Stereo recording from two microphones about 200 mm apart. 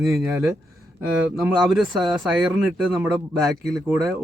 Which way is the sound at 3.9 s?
20° right (ahead or behind).